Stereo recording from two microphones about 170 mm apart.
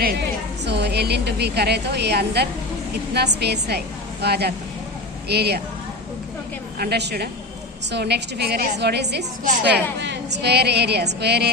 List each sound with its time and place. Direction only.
0.0 s a woman's voice: 80° right
6.7 s a woman's voice: 70° right (ahead or behind)
10.0 s a woman's voice: 90° right